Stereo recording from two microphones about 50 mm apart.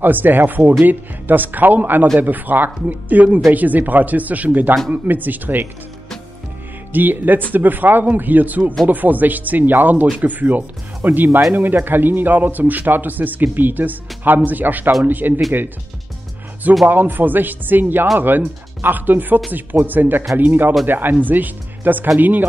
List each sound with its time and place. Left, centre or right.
0.0 s a man's voice: right
6.9 s a man's voice: right
16.8 s a man's voice: right